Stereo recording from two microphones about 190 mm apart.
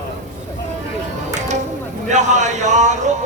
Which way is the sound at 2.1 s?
40° right (ahead or behind).